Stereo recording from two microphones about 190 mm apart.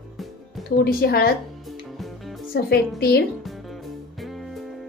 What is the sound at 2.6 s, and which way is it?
Speech, 55° left (ahead or behind).